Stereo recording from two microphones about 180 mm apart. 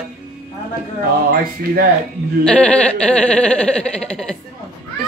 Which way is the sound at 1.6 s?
60° right (ahead or behind).